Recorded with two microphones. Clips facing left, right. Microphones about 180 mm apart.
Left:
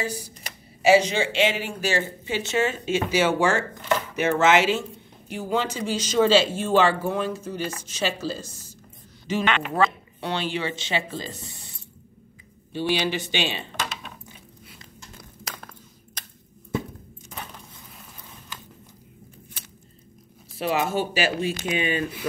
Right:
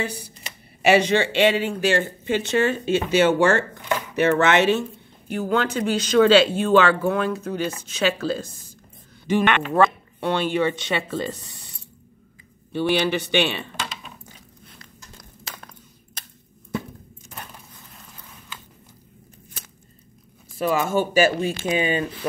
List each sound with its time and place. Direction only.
0.0 s speech: 65° right (ahead or behind)
12.7 s speech: 55° right (ahead or behind)
20.5 s speech: 50° right (ahead or behind)
21.6 s speech: 35° right (ahead or behind)